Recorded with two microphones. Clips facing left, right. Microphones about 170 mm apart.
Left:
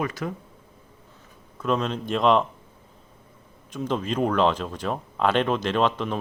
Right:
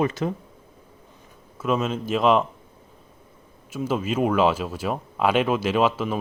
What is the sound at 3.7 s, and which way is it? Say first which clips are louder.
Speech: right 2 dB; 5° right (ahead or behind).